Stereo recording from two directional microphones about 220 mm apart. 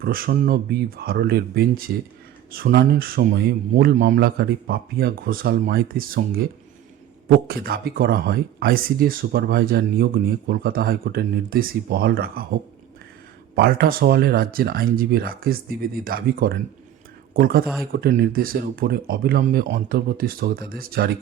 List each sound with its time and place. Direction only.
0.0 s speech: 40° right (ahead or behind)
13.6 s speech: 45° right (ahead or behind)